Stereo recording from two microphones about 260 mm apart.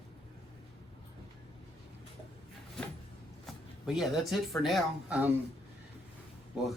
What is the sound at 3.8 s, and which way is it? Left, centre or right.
Speech, centre.